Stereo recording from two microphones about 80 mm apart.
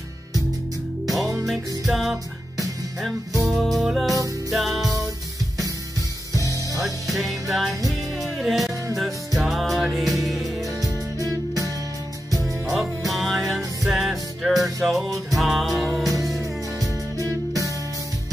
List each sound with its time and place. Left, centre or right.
1.0 s music: centre
3.4 s music: centre
6.8 s music: centre
10.8 s music: right
12.7 s music: centre
16.3 s music: right